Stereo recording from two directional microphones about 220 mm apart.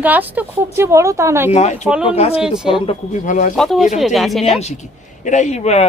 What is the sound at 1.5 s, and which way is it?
Speech, 30° left (ahead or behind).